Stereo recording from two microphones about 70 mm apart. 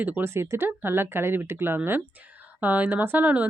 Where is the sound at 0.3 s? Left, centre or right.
Right.